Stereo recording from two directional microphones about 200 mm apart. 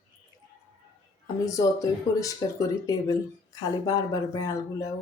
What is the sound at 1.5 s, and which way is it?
Speech, 15° left (ahead or behind).